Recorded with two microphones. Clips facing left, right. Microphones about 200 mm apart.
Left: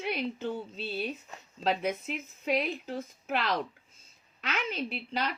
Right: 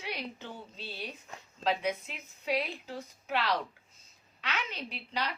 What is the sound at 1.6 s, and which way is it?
A woman's voice, 45° left (ahead or behind).